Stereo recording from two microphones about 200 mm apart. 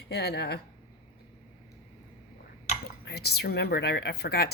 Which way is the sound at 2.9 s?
55° left (ahead or behind).